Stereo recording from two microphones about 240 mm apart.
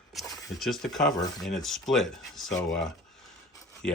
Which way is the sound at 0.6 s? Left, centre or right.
Centre.